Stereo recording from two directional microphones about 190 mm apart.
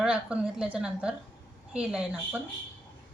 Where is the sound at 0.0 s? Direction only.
5° right (ahead or behind).